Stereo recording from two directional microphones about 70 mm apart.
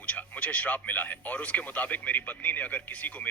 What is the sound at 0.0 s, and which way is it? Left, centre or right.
Speech, centre.